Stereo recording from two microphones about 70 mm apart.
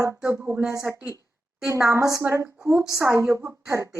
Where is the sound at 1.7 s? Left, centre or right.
Right.